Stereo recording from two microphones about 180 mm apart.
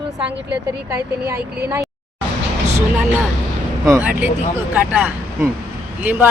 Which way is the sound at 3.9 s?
10° right (ahead or behind).